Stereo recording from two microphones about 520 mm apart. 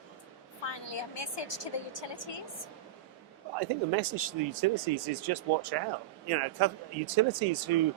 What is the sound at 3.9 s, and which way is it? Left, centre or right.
Speech, right.